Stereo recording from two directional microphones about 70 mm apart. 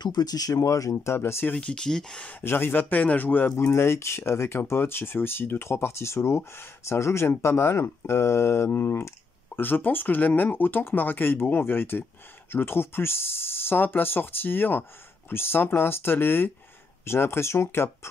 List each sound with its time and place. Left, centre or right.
0.0 s speech: left
1.5 s speech: centre
2.4 s speech: left